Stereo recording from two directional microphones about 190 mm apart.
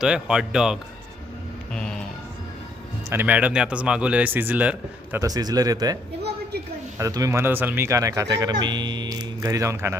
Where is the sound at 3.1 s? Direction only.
10° right (ahead or behind).